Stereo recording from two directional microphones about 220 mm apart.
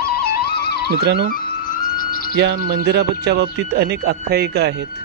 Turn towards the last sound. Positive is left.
turn(degrees=-45)  # may be behind; listen again after turning